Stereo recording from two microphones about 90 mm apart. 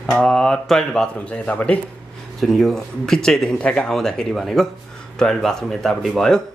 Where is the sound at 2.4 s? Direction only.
Centre (ahead or behind).